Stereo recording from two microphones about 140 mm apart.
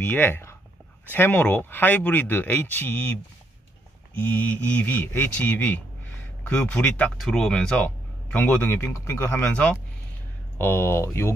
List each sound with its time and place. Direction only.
0.0 s speech: 15° left (ahead or behind)